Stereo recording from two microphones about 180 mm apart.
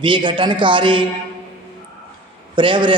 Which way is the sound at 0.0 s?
25° right (ahead or behind).